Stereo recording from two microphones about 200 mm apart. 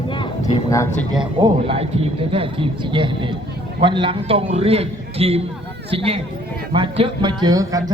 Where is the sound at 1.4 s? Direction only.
30° right (ahead or behind).